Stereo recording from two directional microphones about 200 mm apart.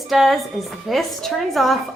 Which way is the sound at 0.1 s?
Centre (ahead or behind).